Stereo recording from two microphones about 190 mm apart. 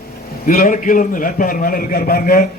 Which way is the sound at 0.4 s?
45° left (ahead or behind).